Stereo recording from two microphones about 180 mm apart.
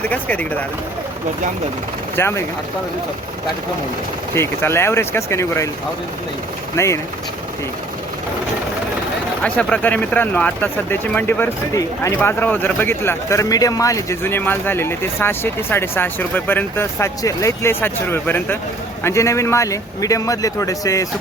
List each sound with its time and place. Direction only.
0.1 s speech: 10° left (ahead or behind)
2.1 s speech: 15° left (ahead or behind)
4.4 s speech: 15° left (ahead or behind)
6.7 s speech: 15° left (ahead or behind)
9.4 s speech: 5° left (ahead or behind)